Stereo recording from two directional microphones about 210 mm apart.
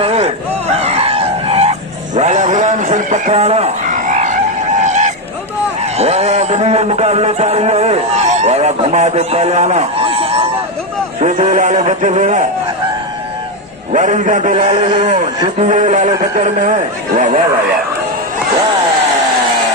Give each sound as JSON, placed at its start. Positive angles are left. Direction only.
{"t": 0.0, "sound": "fowl", "side_deg": -30}
{"t": 0.7, "sound": "chicken", "side_deg": -30}
{"t": 2.1, "sound": "a sound", "side_deg": -35}
{"t": 5.8, "sound": "a man's voice", "side_deg": -30}
{"t": 13.9, "sound": "a man's voice", "side_deg": -35}